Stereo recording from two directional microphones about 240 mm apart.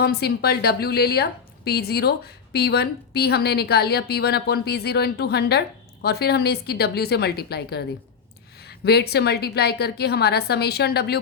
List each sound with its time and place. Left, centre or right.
0.0 s a woman's voice: left